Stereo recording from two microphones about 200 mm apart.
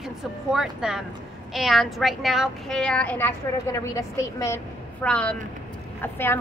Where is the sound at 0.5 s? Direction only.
5° right (ahead or behind).